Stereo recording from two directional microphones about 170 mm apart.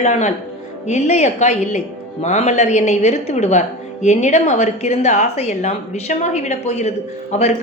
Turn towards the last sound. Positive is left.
turn(degrees=45)  # may be behind; listen again after turning